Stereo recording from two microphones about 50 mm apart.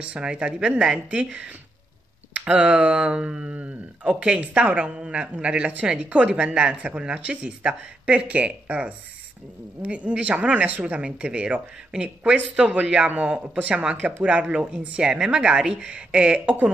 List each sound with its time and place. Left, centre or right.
0.0 s speech: right